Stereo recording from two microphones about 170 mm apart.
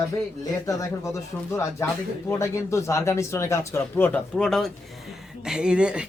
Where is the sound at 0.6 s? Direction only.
20° left (ahead or behind).